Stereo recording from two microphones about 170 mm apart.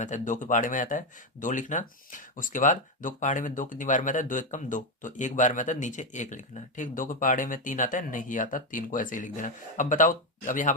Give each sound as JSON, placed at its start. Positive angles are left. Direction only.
{"t": 0.0, "sound": "speech", "side_deg": 45}